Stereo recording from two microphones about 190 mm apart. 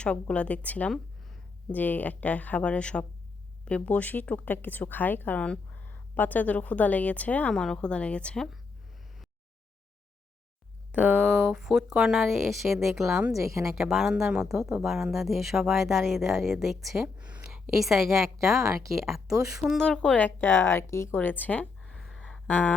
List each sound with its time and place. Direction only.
0.0 s speech: 5° left (ahead or behind)
10.9 s speech: 10° right (ahead or behind)
13.3 s speech: 15° right (ahead or behind)
13.7 s speech: centre (ahead or behind)